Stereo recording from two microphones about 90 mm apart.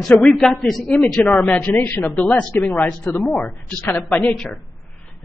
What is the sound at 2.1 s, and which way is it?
Speech, 10° left (ahead or behind).